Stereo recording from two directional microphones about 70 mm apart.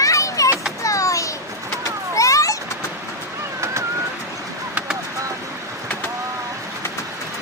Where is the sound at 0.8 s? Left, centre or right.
Left.